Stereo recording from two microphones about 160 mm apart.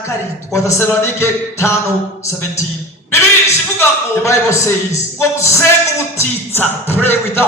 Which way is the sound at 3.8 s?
15° left (ahead or behind).